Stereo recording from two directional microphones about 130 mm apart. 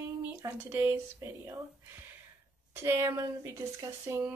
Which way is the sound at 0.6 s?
15° right (ahead or behind).